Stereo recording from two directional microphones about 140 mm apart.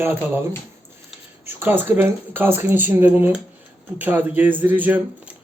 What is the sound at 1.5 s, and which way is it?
Speech, 15° right (ahead or behind).